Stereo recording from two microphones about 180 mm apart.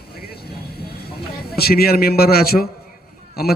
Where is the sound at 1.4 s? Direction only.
60° left (ahead or behind).